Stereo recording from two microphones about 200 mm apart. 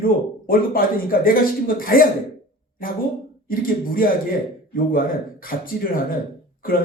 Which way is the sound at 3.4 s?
45° left (ahead or behind).